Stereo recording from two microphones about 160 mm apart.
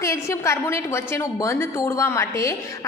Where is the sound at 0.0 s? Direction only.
20° left (ahead or behind).